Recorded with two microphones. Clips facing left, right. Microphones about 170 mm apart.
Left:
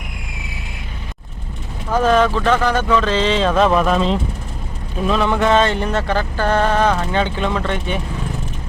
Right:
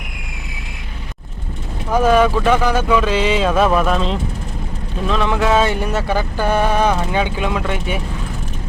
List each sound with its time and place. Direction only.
1.9 s speech: 10° right (ahead or behind)